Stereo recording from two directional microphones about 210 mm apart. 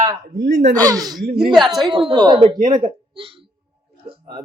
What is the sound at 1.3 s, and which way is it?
Speech, centre (ahead or behind).